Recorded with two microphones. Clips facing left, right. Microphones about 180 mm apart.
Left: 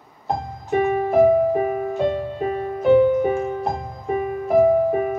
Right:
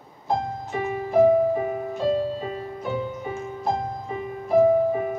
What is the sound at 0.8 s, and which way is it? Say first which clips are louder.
Music: left 3 dB; 65° left (ahead or behind).